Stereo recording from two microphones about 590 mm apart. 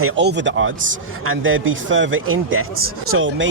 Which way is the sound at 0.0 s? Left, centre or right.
Centre.